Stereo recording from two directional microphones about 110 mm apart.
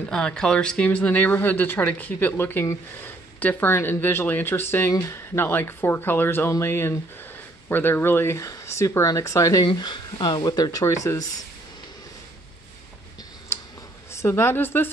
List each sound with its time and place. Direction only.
0.1 s speech: 10° left (ahead or behind); by 9.7 s 30° left (ahead or behind)
9.7 s speech: 45° left (ahead or behind)
14.1 s speech: 25° left (ahead or behind)